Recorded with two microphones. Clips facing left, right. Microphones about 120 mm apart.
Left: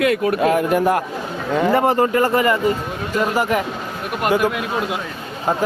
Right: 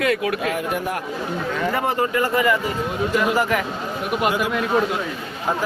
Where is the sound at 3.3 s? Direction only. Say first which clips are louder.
Left 2 dB; 20° left (ahead or behind).